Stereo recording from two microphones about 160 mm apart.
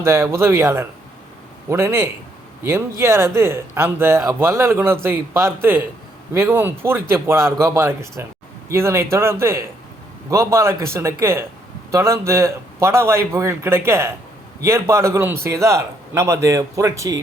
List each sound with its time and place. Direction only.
0.0 s a man's voice: 15° right (ahead or behind)